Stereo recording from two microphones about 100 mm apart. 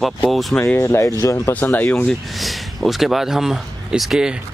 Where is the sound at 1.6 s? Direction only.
15° left (ahead or behind).